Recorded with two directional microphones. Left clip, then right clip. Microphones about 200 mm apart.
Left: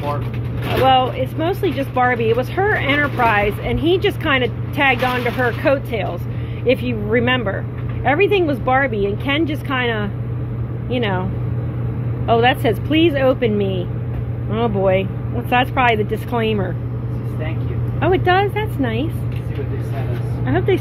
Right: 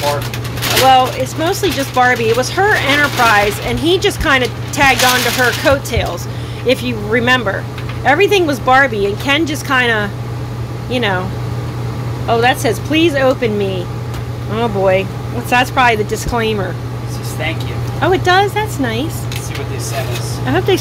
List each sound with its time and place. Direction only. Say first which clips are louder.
0.8 s speech: right 4 dB; 15° right (ahead or behind)
12.3 s speech: right 2 dB; 10° right (ahead or behind)
18.0 s speech: right 4 dB; 15° right (ahead or behind)
20.4 s speech: right 4 dB; 15° right (ahead or behind)